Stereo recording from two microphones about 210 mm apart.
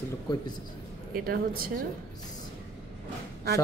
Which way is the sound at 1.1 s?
45° right (ahead or behind).